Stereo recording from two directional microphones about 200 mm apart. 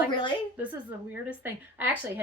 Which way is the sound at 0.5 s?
10° right (ahead or behind).